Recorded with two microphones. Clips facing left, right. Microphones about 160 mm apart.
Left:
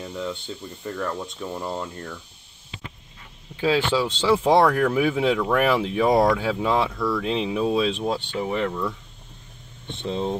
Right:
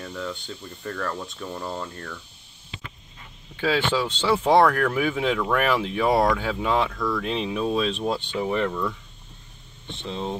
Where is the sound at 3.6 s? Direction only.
10° left (ahead or behind).